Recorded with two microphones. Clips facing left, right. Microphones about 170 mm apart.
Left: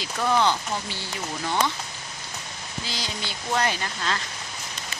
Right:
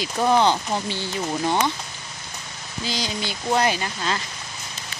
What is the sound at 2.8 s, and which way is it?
Speech, 15° right (ahead or behind).